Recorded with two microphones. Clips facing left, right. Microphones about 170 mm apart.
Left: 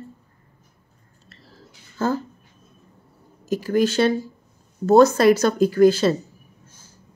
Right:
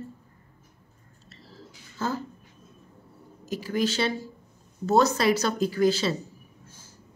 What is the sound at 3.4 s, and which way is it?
Speech, 50° left (ahead or behind).